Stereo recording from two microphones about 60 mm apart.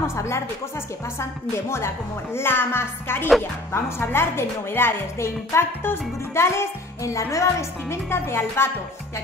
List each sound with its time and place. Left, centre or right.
0.0 s a woman's voice: left
2.3 s music: left
3.7 s a woman's voice: left
7.9 s a woman's voice: left